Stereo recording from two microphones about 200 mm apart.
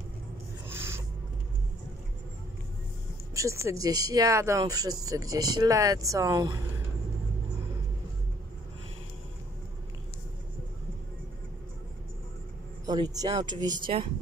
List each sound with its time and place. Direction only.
0.7 s a sound: 10° right (ahead or behind)
3.3 s speech: 15° right (ahead or behind)
12.8 s speech: 20° right (ahead or behind)